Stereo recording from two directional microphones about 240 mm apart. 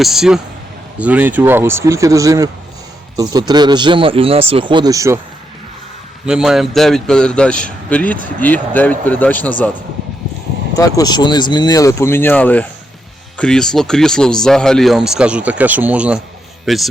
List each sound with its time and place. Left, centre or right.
0.0 s a man's voice: centre
6.2 s a man's voice: centre
10.8 s a man's voice: centre